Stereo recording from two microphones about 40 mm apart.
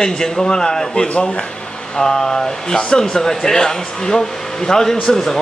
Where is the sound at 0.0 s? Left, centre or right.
Centre.